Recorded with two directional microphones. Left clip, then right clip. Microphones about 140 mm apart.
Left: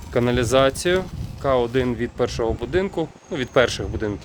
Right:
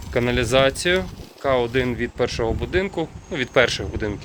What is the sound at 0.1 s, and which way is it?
Speech, 45° left (ahead or behind).